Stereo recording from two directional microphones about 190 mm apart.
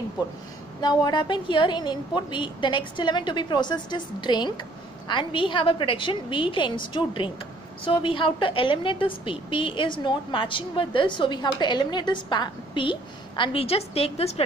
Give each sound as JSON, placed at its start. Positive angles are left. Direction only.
{"t": 0.7, "sound": "a woman's voice", "side_deg": 20}